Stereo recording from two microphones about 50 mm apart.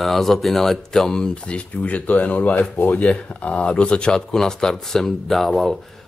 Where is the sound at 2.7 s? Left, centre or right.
Left.